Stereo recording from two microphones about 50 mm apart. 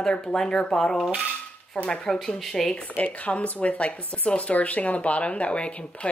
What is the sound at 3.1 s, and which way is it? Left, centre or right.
Speech, left.